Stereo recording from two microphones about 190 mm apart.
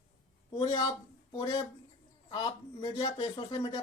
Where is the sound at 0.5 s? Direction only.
25° left (ahead or behind).